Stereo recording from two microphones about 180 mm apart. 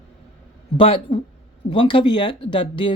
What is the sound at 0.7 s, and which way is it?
Speech, 30° left (ahead or behind).